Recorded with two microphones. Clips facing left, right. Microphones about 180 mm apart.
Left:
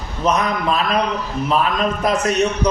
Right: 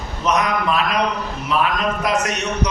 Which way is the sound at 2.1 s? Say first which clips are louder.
Left 4 dB; 30° left (ahead or behind).